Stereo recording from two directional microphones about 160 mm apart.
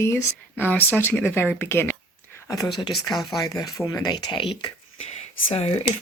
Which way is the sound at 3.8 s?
25° left (ahead or behind).